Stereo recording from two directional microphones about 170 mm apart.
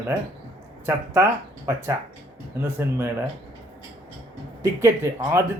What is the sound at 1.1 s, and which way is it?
Speech, 15° right (ahead or behind).